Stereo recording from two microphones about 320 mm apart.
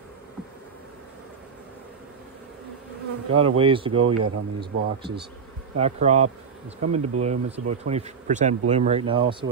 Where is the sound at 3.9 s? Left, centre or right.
Right.